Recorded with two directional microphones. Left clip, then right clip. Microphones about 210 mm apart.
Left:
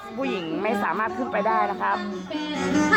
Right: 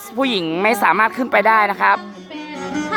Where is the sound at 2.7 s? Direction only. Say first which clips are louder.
Left 2 dB; 5° right (ahead or behind).